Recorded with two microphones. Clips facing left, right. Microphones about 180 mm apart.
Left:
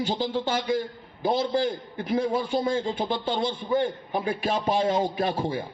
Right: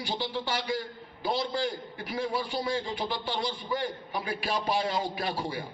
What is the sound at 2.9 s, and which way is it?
Speech, 25° left (ahead or behind).